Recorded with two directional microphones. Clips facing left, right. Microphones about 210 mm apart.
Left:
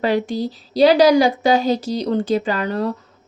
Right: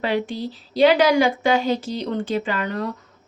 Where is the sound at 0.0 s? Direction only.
40° left (ahead or behind).